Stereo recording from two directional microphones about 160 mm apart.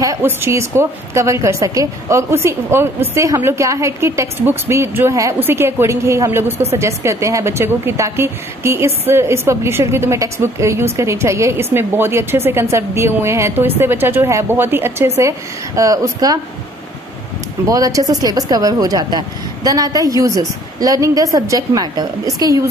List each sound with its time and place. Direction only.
0.0 s a woman's voice: 20° right (ahead or behind)
17.6 s speech: 20° right (ahead or behind)